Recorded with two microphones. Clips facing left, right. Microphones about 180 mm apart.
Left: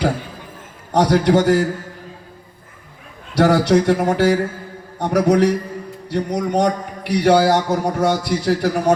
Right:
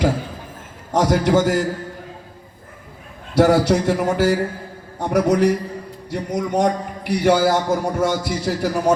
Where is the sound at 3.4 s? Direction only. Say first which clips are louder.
Left 1 dB; 65° left (ahead or behind).